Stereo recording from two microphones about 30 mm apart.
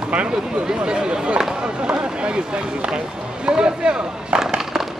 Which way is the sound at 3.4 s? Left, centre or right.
Right.